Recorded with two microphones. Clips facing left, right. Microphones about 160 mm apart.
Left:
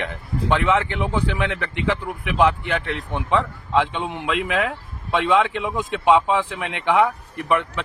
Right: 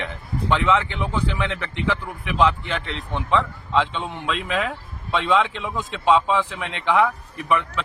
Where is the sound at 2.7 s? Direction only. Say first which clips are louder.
Left 4 dB; 65° left (ahead or behind).